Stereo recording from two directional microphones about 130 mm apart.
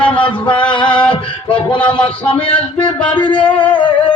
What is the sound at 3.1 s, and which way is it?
Music, 35° left (ahead or behind).